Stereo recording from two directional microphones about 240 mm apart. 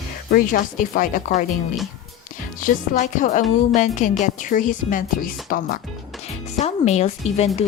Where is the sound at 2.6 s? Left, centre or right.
Left.